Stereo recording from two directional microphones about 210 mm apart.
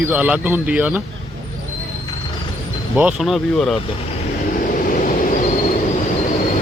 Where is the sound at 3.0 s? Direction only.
5° right (ahead or behind).